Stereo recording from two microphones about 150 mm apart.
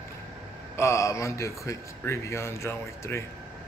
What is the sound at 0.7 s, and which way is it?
A man's voice, 20° left (ahead or behind).